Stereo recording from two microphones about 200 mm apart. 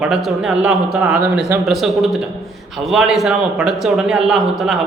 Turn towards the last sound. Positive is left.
turn(degrees=0)  # may be behind; listen again after turning